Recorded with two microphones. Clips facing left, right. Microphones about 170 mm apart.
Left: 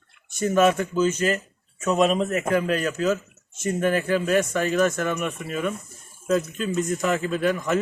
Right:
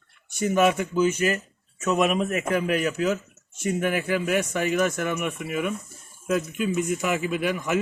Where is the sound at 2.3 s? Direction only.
15° right (ahead or behind).